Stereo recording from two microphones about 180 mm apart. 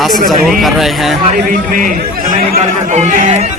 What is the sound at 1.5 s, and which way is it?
Speech, 45° right (ahead or behind).